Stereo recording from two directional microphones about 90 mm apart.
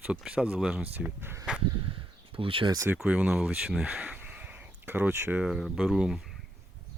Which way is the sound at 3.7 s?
5° right (ahead or behind).